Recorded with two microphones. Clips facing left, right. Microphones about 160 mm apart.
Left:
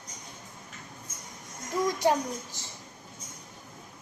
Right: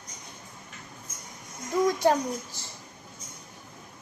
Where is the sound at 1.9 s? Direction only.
15° left (ahead or behind).